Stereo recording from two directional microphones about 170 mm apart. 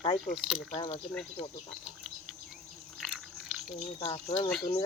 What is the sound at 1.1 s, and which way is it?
Speech, 5° left (ahead or behind).